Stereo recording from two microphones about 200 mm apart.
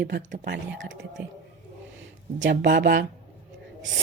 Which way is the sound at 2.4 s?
60° right (ahead or behind).